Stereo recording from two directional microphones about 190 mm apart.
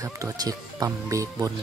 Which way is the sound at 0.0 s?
20° right (ahead or behind).